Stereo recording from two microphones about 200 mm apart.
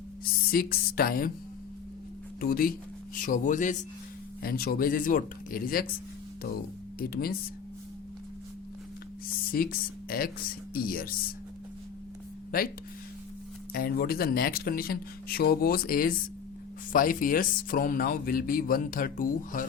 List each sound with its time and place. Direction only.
0.5 s speech: 50° left (ahead or behind)
2.4 s speech: 45° left (ahead or behind)
7.0 s speech: 50° left (ahead or behind)
9.5 s speech: 45° left (ahead or behind)
12.5 s speech: 45° left (ahead or behind)
13.7 s speech: 50° left (ahead or behind)